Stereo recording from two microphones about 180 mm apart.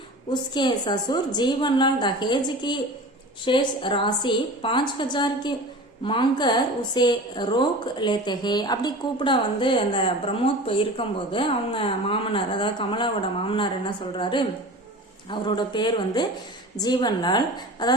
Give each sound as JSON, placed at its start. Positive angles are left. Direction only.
{"t": 0.3, "sound": "a woman's voice", "side_deg": 25}